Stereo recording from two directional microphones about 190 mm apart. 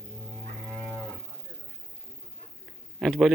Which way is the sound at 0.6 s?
5° left (ahead or behind).